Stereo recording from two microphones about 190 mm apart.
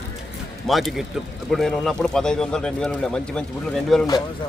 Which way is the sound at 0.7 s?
Centre (ahead or behind).